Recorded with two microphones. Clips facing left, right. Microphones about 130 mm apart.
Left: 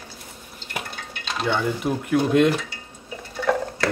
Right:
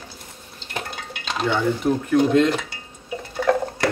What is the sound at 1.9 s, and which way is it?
Speech, 15° left (ahead or behind).